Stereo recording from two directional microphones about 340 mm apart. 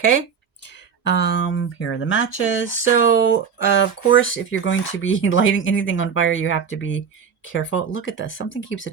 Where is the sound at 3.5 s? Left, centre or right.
Left.